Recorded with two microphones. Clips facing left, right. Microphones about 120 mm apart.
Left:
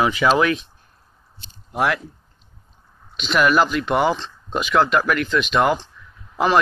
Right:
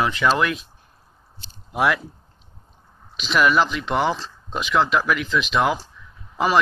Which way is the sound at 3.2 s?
Centre (ahead or behind).